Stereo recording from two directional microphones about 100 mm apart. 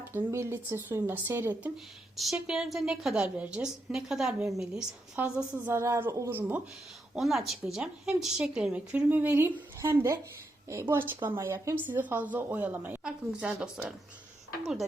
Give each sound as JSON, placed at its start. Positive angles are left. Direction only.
{"t": 0.3, "sound": "speech", "side_deg": -25}
{"t": 2.1, "sound": "a woman's voice", "side_deg": 0}
{"t": 5.6, "sound": "speech", "side_deg": -25}
{"t": 7.2, "sound": "a woman's voice", "side_deg": 0}
{"t": 11.9, "sound": "speech", "side_deg": -15}
{"t": 13.1, "sound": "a woman's voice", "side_deg": -5}